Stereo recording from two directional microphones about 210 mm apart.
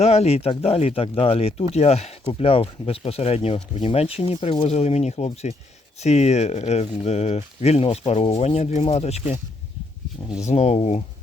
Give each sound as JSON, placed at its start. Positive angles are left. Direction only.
{"t": 0.0, "sound": "speech", "side_deg": 30}
{"t": 10.4, "sound": "speech", "side_deg": 30}